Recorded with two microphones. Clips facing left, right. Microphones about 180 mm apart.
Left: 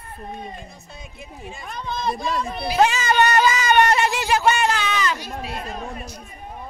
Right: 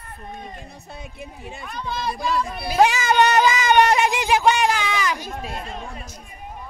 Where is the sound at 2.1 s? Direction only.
25° left (ahead or behind).